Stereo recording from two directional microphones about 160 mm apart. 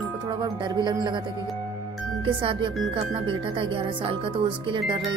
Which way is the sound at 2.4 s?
30° right (ahead or behind).